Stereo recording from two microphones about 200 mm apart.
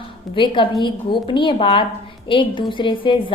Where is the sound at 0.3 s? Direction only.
25° left (ahead or behind).